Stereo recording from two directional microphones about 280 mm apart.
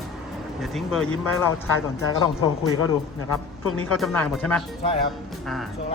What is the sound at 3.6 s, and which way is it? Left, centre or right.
Speech, left.